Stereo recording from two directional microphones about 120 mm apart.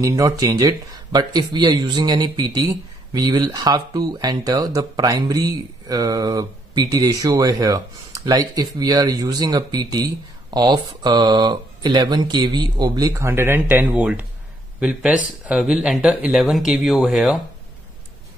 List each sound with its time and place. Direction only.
0.0 s speech: 30° right (ahead or behind); by 17.4 s centre (ahead or behind)